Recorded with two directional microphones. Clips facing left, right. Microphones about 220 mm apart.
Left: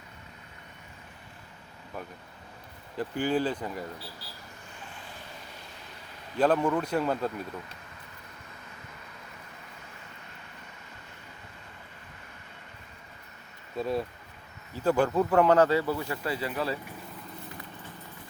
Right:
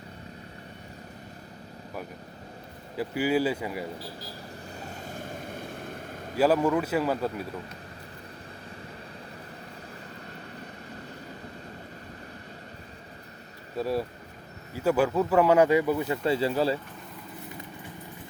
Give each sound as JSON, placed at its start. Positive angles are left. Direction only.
{"t": 3.0, "sound": "speech", "side_deg": -10}
{"t": 4.8, "sound": "vehicle", "side_deg": -40}
{"t": 6.3, "sound": "speech", "side_deg": -5}
{"t": 13.7, "sound": "speech", "side_deg": -5}